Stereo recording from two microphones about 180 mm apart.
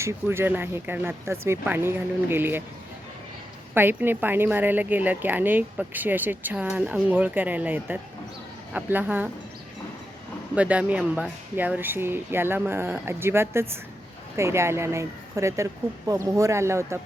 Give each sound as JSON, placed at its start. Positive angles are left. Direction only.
{"t": 0.0, "sound": "speech", "side_deg": -15}
{"t": 3.8, "sound": "speech", "side_deg": -10}
{"t": 10.5, "sound": "speech", "side_deg": -5}